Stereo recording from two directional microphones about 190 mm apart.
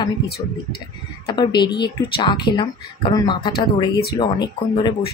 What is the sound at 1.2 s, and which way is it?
A woman's voice, 25° left (ahead or behind).